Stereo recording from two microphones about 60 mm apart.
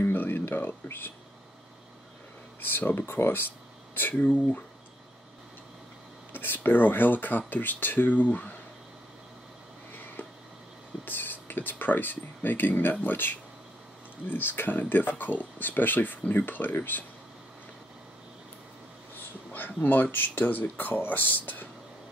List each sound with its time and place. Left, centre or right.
0.0 s speech: left
2.6 s speech: left
6.3 s speech: left
11.1 s speech: left
19.1 s a sound: left
19.8 s speech: left